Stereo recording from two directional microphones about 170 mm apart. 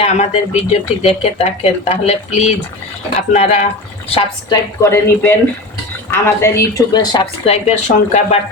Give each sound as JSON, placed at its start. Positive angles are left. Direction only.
{"t": 0.0, "sound": "speech", "side_deg": 40}
{"t": 4.1, "sound": "speech", "side_deg": 30}
{"t": 4.8, "sound": "speech", "side_deg": 15}
{"t": 7.5, "sound": "speech", "side_deg": 40}